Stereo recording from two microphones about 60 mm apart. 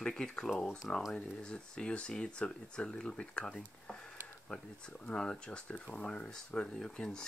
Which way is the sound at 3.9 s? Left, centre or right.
Centre.